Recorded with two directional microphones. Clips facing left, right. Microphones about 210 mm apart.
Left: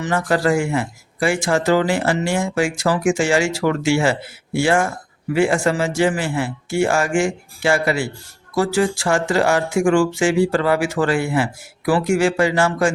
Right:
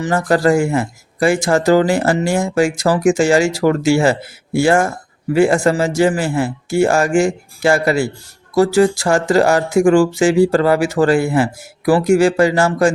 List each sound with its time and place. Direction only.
0.0 s speech: 40° right (ahead or behind)